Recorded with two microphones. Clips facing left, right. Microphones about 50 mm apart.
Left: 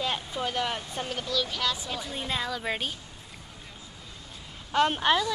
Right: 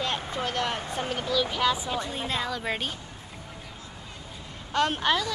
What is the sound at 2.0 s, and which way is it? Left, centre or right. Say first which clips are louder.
Child singing: right 2 dB; centre.